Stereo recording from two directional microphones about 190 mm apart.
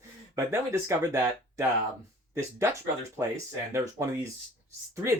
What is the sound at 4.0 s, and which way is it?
Speech, 15° right (ahead or behind).